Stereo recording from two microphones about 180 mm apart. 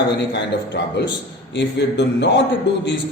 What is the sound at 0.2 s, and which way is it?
A man's voice, 70° left (ahead or behind).